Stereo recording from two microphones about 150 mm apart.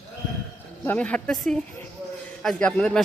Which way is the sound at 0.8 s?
10° left (ahead or behind).